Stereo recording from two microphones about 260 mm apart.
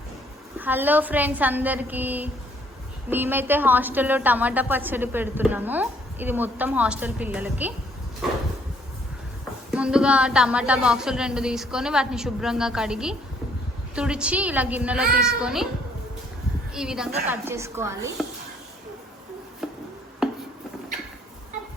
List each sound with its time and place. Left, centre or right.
0.6 s a woman's voice: centre
9.7 s a woman's voice: centre
16.7 s a woman's voice: centre
19.6 s music: centre